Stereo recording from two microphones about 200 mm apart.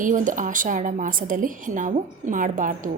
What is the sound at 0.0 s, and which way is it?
A woman's voice, 40° right (ahead or behind).